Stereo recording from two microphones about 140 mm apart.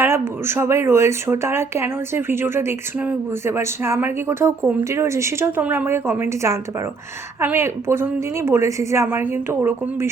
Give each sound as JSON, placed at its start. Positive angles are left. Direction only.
{"t": 0.0, "sound": "speech", "side_deg": -15}